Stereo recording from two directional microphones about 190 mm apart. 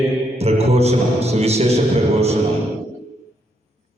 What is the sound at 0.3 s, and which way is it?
Music, 35° right (ahead or behind).